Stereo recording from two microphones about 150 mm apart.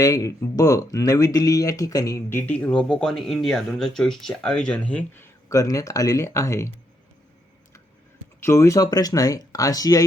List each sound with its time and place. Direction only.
0.0 s speech: 20° left (ahead or behind)
8.4 s speech: 20° left (ahead or behind)